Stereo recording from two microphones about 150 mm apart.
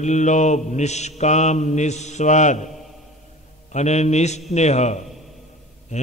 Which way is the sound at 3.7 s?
50° left (ahead or behind).